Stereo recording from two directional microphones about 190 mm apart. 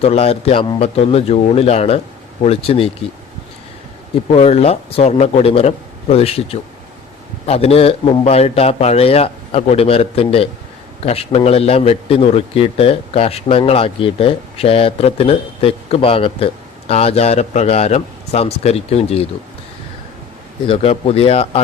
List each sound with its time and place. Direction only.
0.0 s a man's voice: 30° left (ahead or behind)
4.3 s a man's voice: 30° left (ahead or behind)
20.7 s a man's voice: 30° left (ahead or behind)